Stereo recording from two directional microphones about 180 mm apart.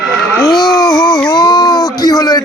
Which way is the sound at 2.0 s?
20° left (ahead or behind).